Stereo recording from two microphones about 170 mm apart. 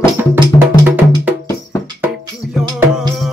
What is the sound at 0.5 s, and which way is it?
Music, 20° left (ahead or behind).